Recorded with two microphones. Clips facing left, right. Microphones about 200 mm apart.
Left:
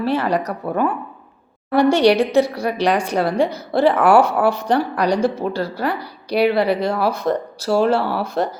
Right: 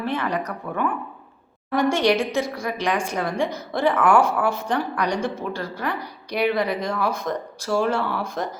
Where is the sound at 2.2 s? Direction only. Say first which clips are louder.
Left 8 dB; 65° left (ahead or behind).